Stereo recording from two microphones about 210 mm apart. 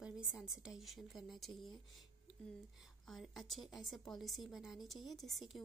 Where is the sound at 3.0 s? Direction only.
Centre (ahead or behind).